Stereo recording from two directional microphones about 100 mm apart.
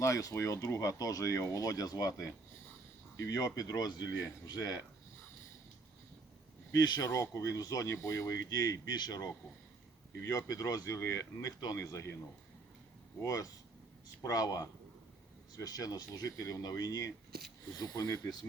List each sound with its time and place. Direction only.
0.0 s speech: 35° left (ahead or behind)
3.2 s speech: 35° left (ahead or behind)
6.7 s speech: 40° left (ahead or behind)
13.2 s speech: 35° left (ahead or behind)